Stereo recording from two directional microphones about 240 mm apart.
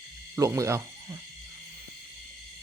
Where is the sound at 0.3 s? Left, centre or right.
Centre.